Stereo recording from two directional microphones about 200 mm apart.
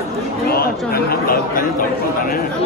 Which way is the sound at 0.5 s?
50° left (ahead or behind).